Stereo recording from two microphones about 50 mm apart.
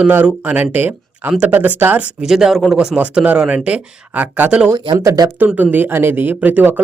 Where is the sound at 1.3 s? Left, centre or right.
Right.